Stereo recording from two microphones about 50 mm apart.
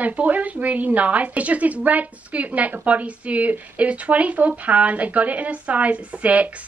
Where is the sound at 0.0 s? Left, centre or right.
Right.